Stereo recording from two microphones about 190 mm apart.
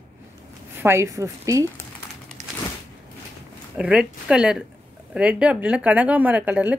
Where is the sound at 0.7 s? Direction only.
15° right (ahead or behind).